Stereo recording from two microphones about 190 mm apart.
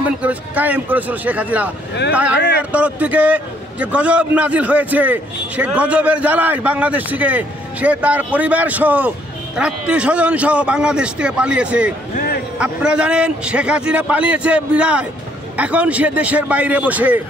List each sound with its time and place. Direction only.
0.0 s a man's voice: 5° right (ahead or behind)
2.7 s a man's voice: 10° right (ahead or behind)